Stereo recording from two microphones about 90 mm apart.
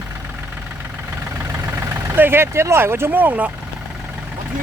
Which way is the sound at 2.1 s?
25° right (ahead or behind).